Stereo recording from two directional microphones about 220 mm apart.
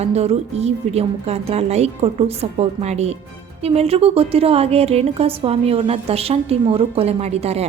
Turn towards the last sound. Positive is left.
turn(degrees=-30)  # may be behind; listen again after turning